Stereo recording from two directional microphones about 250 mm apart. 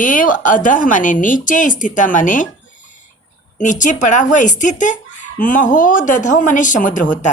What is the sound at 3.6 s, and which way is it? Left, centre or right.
Speech, left.